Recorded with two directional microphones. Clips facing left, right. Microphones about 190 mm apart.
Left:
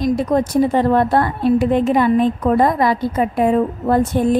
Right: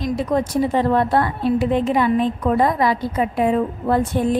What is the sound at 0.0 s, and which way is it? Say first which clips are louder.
A woman's voice: left 4 dB; 45° left (ahead or behind).